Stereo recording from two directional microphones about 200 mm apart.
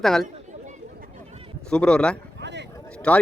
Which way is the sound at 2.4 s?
60° right (ahead or behind).